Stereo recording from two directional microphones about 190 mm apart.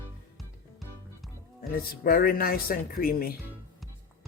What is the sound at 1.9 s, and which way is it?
Speech, 50° left (ahead or behind).